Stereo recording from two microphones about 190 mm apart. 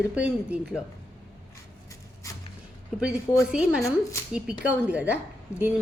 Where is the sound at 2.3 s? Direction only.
15° left (ahead or behind).